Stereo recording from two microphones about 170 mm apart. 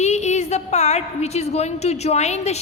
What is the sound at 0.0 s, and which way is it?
A woman's voice, 40° left (ahead or behind).